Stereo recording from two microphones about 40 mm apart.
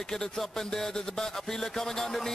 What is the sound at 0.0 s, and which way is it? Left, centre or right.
Speech, centre.